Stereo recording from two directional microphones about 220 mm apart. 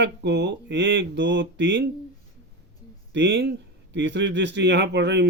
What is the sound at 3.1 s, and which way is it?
Speech, 55° right (ahead or behind).